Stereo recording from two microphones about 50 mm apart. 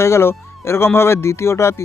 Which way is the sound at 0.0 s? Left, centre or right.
Left.